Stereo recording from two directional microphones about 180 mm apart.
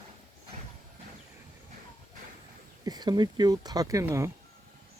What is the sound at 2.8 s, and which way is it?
Speech, 20° right (ahead or behind).